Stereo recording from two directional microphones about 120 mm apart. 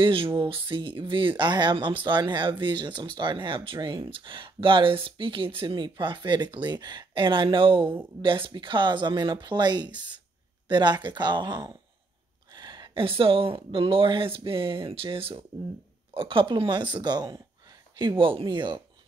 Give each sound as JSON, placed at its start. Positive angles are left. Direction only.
{"t": 0.0, "sound": "speech", "side_deg": -45}